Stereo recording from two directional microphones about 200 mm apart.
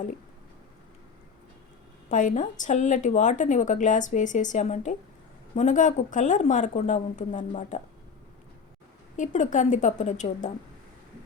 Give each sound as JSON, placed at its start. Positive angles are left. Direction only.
{"t": 2.0, "sound": "a woman's voice", "side_deg": 40}
{"t": 9.1, "sound": "a woman's voice", "side_deg": 40}